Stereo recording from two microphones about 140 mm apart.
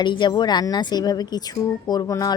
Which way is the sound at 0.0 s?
35° left (ahead or behind).